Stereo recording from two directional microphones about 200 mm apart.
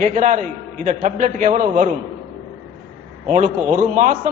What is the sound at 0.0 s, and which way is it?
A man's voice, 40° right (ahead or behind).